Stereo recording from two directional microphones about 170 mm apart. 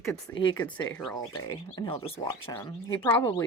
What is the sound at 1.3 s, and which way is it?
Speech, 20° left (ahead or behind).